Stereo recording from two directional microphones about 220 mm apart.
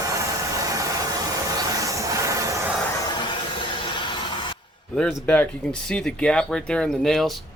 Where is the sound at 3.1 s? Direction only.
20° left (ahead or behind).